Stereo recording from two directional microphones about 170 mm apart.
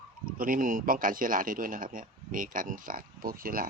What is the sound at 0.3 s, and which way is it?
Speech, 55° right (ahead or behind).